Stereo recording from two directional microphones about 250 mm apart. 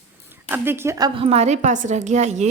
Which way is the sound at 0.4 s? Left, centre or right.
Centre.